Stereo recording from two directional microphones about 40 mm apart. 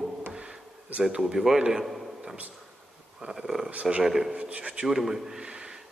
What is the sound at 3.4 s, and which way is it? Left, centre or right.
Speech, centre.